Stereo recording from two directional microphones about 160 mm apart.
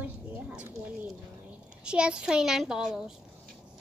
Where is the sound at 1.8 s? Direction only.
5° right (ahead or behind).